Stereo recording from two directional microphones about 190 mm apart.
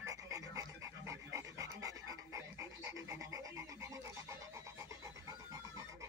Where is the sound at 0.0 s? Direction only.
15° right (ahead or behind).